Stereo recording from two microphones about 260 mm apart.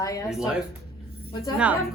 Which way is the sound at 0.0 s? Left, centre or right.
Centre.